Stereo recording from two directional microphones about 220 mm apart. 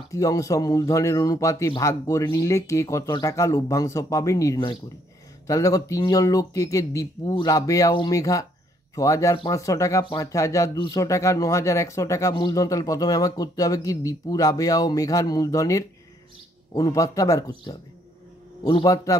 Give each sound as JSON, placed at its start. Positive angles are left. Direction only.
{"t": 0.1, "sound": "a man's voice", "side_deg": 15}